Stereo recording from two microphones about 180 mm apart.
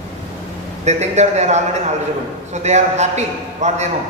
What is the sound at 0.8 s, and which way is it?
A man's voice, 40° right (ahead or behind).